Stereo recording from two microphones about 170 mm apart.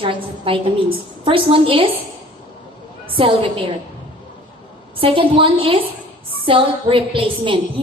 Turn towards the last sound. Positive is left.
turn(degrees=-30)  # may be behind; listen again after turning